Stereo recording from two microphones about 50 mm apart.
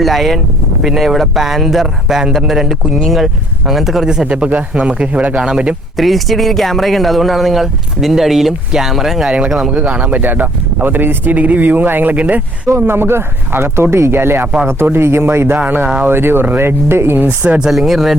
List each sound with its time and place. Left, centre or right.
0.0 s a man's voice: centre; by 5.4 s right
5.4 s speech: centre
6.0 s speech: centre
9.7 s speech: right
12.8 s speech: right
15.5 s speech: right
16.0 s speech: right
17.2 s a man's voice: right
17.6 s speech: centre